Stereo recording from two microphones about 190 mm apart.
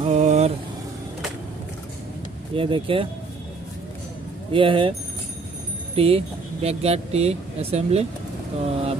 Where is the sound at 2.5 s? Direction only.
30° right (ahead or behind).